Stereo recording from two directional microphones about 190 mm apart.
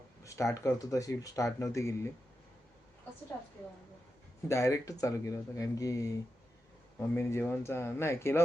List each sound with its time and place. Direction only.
0.3 s speech: 15° left (ahead or behind)
4.4 s speech: 15° left (ahead or behind)